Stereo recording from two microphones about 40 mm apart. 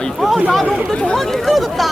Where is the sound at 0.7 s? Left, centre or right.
Left.